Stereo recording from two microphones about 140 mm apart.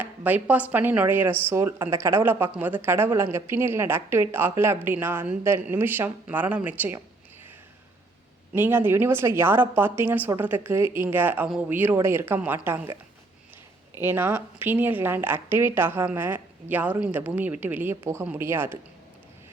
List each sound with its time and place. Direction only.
0.0 s speech: 10° right (ahead or behind)
8.5 s speech: 15° right (ahead or behind)
13.9 s speech: 15° right (ahead or behind)